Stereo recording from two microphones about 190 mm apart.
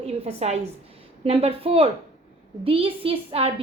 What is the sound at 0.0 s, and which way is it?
A woman's voice, 35° right (ahead or behind).